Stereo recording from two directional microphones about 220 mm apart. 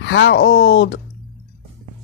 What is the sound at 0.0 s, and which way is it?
Speech, 55° left (ahead or behind).